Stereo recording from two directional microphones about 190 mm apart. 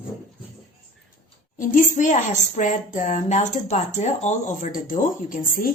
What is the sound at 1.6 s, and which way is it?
A woman's voice, 45° left (ahead or behind).